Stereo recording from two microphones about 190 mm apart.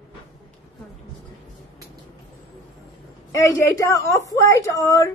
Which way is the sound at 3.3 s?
15° left (ahead or behind).